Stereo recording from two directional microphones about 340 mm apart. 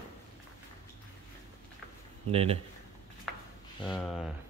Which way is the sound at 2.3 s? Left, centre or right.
Centre.